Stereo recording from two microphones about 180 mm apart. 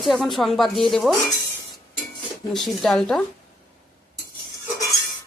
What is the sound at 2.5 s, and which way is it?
Speech, centre (ahead or behind).